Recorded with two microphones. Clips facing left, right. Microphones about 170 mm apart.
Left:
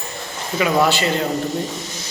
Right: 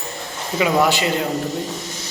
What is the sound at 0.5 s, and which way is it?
Speech, 15° right (ahead or behind).